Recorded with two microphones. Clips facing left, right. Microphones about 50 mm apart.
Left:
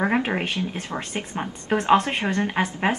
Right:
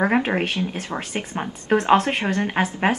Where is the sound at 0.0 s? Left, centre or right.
Centre.